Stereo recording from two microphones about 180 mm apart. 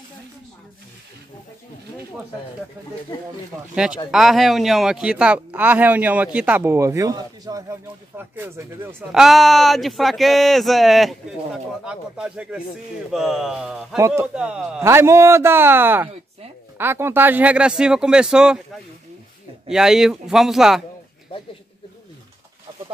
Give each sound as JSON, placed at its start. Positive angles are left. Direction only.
{"t": 3.1, "sound": "speech", "side_deg": 25}
{"t": 3.7, "sound": "speech", "side_deg": -5}
{"t": 9.1, "sound": "speech", "side_deg": 0}
{"t": 13.9, "sound": "speech", "side_deg": -15}
{"t": 19.7, "sound": "speech", "side_deg": -5}